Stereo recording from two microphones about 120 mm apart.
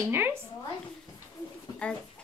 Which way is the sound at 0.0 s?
20° right (ahead or behind).